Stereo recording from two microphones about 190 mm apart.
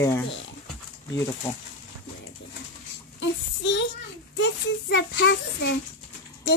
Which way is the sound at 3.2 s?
70° left (ahead or behind).